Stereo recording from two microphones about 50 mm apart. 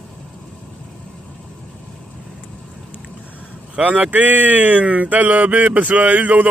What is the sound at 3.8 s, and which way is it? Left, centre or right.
A man's voice, right.